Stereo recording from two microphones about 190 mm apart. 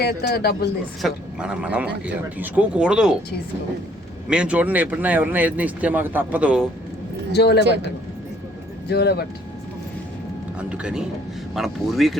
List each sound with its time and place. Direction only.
0.0 s a man's voice: 55° left (ahead or behind)
1.0 s a man's voice: 5° right (ahead or behind)
4.3 s a man's voice: 5° right (ahead or behind)
7.3 s a man's voice: 60° left (ahead or behind)
8.9 s a man's voice: 60° left (ahead or behind)
10.6 s a man's voice: 5° right (ahead or behind)